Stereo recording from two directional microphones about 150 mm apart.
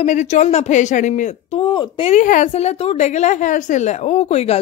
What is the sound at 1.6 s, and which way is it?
Speech, 30° left (ahead or behind).